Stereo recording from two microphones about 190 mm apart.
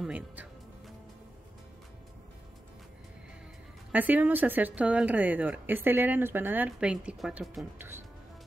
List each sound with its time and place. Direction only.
0.0 s music: 5° right (ahead or behind)
3.9 s speech: 10° right (ahead or behind)